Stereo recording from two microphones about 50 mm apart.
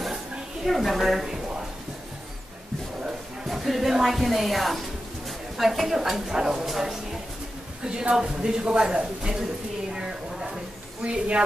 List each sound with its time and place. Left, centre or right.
0.7 s speech: centre
3.4 s speech: centre
9.9 s a sound: centre
11.1 s speech: right